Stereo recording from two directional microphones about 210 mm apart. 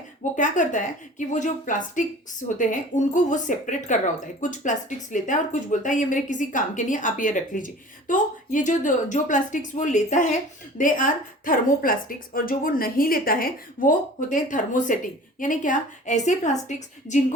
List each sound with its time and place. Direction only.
0.3 s speech: 35° left (ahead or behind)